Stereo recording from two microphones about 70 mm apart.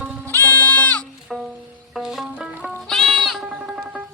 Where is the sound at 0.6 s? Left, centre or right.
Left.